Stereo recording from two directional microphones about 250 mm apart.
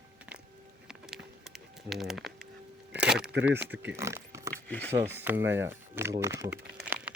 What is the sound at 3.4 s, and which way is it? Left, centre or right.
Speech, centre.